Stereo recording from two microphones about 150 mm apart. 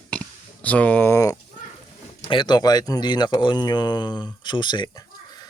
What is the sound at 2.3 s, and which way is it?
Speech, 30° left (ahead or behind).